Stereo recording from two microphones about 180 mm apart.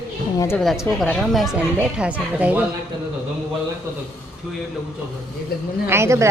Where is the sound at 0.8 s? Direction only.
5° left (ahead or behind).